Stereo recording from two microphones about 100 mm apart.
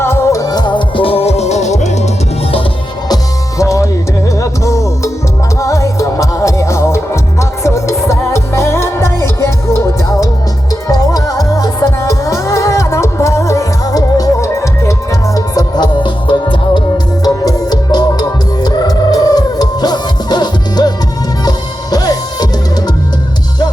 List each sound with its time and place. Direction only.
0.0 s music: 25° left (ahead or behind); by 1.5 s 90° left
3.6 s music: 30° left (ahead or behind); by 16.8 s 55° left (ahead or behind)
17.2 s music: 40° left (ahead or behind)